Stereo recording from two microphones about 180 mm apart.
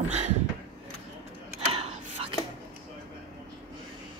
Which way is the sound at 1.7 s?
35° right (ahead or behind).